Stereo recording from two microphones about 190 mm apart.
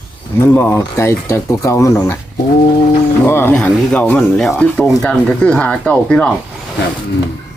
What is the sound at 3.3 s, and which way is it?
Speech, 10° left (ahead or behind).